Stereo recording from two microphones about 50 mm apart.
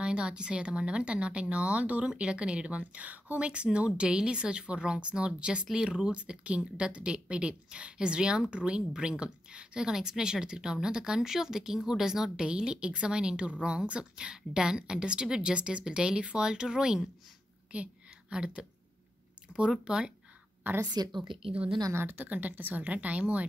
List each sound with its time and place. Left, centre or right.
0.0 s speech: centre
3.4 s a woman's voice: right
18.3 s a woman's voice: centre
19.7 s a woman's voice: centre
20.7 s speech: right
22.1 s speech: right